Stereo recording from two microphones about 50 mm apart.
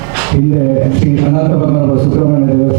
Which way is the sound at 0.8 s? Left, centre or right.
Right.